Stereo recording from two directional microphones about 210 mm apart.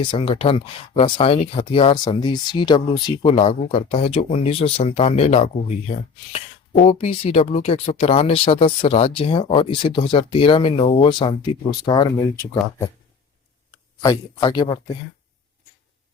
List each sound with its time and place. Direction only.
0.0 s speech: 25° left (ahead or behind)
6.7 s speech: 30° left (ahead or behind)
14.0 s speech: 15° left (ahead or behind)